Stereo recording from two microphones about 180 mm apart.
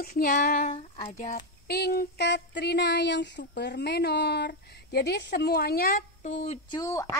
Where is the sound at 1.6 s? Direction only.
60° left (ahead or behind).